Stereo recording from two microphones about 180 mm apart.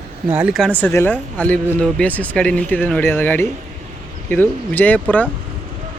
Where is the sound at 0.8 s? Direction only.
10° left (ahead or behind).